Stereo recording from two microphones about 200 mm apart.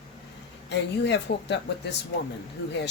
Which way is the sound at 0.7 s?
60° left (ahead or behind).